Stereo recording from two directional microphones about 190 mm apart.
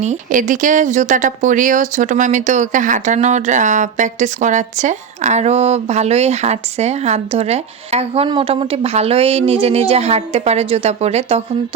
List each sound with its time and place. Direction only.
0.0 s speech: 40° right (ahead or behind)